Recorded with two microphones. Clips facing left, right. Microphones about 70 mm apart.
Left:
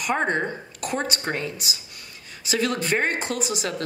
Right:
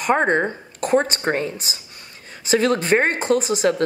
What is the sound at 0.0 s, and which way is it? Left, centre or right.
A woman's voice, right.